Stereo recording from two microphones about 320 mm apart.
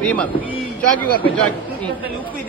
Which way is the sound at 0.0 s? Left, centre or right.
Centre.